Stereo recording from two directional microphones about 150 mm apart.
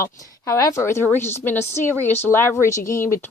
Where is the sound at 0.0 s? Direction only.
20° left (ahead or behind).